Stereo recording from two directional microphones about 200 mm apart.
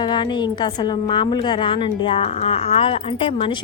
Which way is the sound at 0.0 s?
20° left (ahead or behind).